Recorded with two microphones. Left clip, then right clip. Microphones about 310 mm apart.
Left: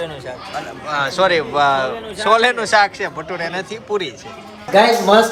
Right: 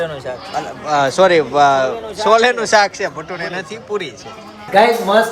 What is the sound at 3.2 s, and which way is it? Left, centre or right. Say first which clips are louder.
Speech: even; centre.